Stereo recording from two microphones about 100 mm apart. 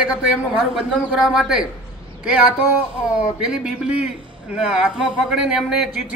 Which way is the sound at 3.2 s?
10° right (ahead or behind).